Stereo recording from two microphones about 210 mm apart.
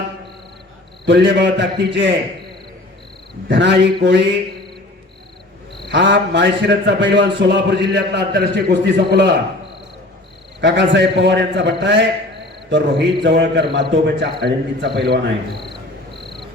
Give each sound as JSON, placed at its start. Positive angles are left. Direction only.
{"t": 1.0, "sound": "a man's voice", "side_deg": -55}
{"t": 3.5, "sound": "a man's voice", "side_deg": -55}
{"t": 5.9, "sound": "a man's voice", "side_deg": -55}
{"t": 10.6, "sound": "a man's voice", "side_deg": -55}